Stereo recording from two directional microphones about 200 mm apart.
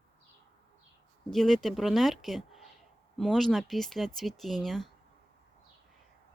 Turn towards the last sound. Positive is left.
turn(degrees=0)  # may be behind; listen again after turning